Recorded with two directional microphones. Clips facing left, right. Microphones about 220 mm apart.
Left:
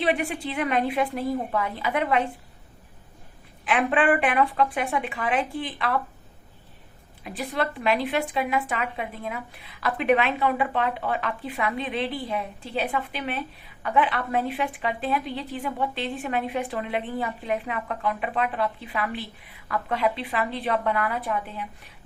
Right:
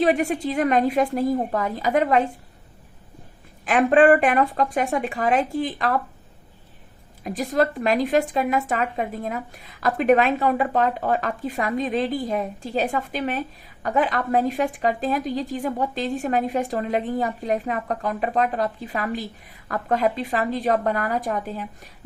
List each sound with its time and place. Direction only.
0.0 s a woman's voice: 40° right (ahead or behind)
3.7 s speech: 40° right (ahead or behind)
7.3 s a woman's voice: 40° right (ahead or behind)